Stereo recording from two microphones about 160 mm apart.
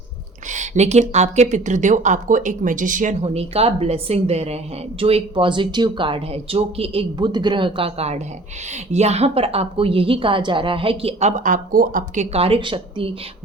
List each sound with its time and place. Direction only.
0.5 s speech: 50° right (ahead or behind)